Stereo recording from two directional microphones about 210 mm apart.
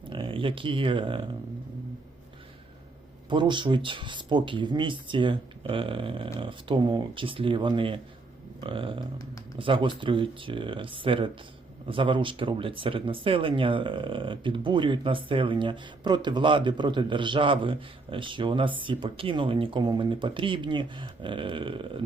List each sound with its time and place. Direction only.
0.1 s speech: 25° right (ahead or behind)
3.2 s speech: 20° right (ahead or behind)